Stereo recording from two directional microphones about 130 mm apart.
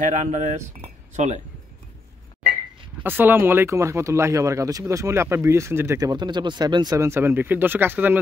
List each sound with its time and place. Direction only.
0.0 s cutlery: 70° right (ahead or behind)
1.1 s speech: 60° right (ahead or behind)
3.0 s speech: 15° right (ahead or behind)